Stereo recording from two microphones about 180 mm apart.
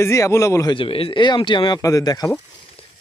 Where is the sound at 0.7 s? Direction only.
30° left (ahead or behind).